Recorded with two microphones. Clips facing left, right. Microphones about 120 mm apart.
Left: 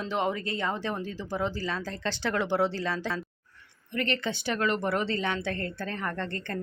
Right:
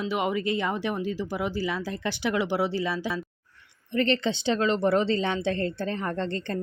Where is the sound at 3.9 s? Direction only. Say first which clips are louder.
Right 5 dB; 30° right (ahead or behind).